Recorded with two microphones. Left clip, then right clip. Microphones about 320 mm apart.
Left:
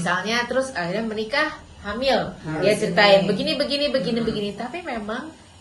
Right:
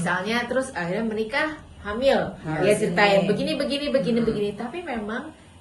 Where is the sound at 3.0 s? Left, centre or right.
Centre.